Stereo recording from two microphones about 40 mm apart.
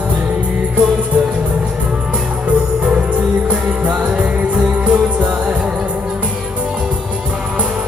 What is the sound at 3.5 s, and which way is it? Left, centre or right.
Music, right.